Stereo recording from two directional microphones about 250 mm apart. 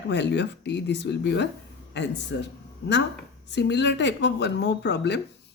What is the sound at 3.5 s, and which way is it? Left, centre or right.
Speech, left.